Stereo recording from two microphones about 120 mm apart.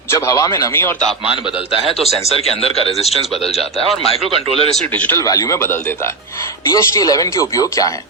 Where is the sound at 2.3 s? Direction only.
55° left (ahead or behind).